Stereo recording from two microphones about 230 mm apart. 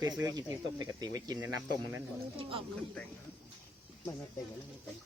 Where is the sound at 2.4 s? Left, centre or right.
Right.